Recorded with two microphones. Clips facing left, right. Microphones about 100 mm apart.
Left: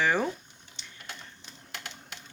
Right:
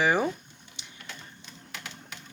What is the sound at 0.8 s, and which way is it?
Printer, 15° right (ahead or behind).